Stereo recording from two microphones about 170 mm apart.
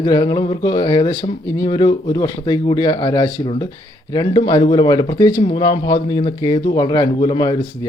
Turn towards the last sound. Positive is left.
turn(degrees=30)  # may be behind; listen again after turning